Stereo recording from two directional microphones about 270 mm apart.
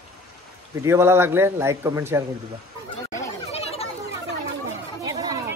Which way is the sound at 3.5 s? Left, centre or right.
Left.